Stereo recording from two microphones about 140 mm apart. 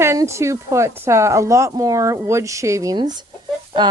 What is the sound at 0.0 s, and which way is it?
Speech, 20° right (ahead or behind).